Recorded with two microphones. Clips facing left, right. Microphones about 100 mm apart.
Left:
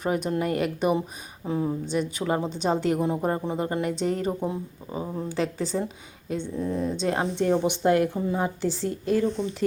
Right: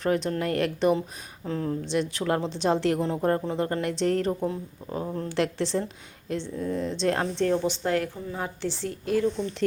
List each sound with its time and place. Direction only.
0.0 s a woman's voice: 10° left (ahead or behind)